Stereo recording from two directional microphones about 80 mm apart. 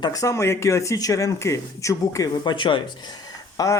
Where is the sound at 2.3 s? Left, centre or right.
Left.